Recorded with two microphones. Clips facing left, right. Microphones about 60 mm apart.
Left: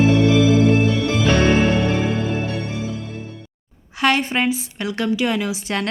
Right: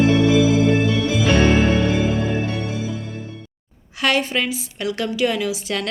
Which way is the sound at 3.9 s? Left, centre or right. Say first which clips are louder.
Left 1 dB; left.